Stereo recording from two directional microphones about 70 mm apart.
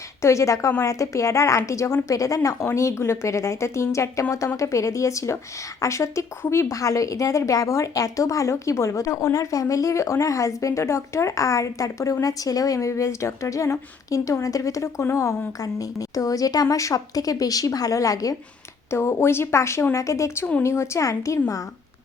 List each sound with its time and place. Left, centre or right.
0.2 s a woman's voice: left
18.9 s a woman's voice: left